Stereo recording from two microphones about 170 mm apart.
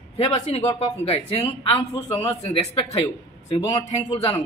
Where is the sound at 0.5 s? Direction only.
40° left (ahead or behind).